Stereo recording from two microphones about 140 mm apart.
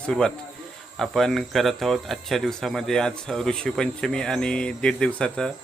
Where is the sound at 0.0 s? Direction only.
5° left (ahead or behind).